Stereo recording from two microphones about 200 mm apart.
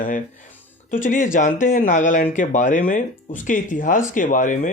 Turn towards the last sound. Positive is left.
turn(degrees=40)  # may be behind; listen again after turning